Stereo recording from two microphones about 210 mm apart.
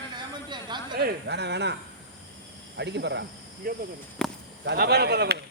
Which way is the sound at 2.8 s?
55° right (ahead or behind).